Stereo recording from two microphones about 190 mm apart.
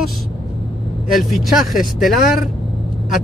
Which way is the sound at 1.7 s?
50° left (ahead or behind).